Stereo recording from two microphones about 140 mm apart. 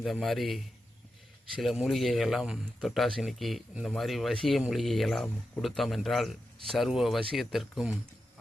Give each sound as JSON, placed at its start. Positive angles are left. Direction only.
{"t": 0.0, "sound": "a man's voice", "side_deg": 0}